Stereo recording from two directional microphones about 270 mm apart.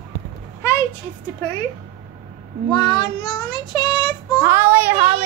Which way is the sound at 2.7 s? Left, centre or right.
Centre.